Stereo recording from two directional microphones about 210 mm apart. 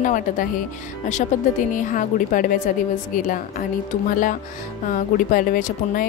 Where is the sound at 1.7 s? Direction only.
40° left (ahead or behind).